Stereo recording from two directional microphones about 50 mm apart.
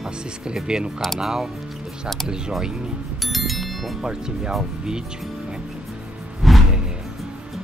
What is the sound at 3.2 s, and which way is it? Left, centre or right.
Music, centre.